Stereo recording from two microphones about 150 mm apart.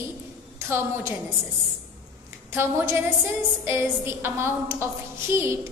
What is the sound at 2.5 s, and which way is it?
A woman's voice, 15° right (ahead or behind).